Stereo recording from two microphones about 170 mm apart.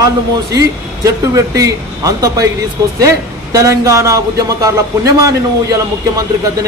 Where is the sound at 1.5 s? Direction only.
20° right (ahead or behind).